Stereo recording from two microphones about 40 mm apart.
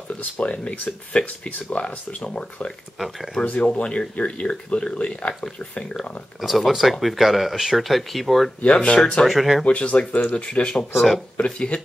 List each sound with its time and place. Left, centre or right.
0.2 s speech: left
3.0 s speech: centre
3.4 s speech: left
6.4 s speech: centre
8.6 s speech: left
9.2 s speech: centre
9.7 s speech: left